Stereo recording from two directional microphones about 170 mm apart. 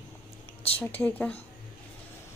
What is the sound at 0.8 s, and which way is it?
Speech, 10° left (ahead or behind).